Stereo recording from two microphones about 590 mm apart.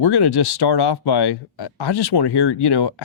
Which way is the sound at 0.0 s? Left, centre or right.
Left.